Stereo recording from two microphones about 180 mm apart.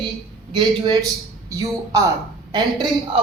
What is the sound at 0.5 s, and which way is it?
A man's voice, 25° right (ahead or behind).